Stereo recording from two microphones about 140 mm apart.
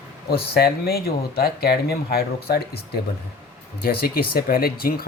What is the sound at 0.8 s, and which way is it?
Speech, 90° left.